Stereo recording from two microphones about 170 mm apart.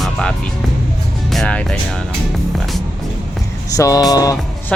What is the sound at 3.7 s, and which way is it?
Speech, 20° left (ahead or behind).